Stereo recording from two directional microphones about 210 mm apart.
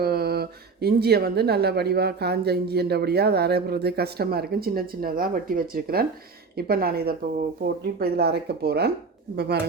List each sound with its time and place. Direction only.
0.0 s speech: 50° right (ahead or behind)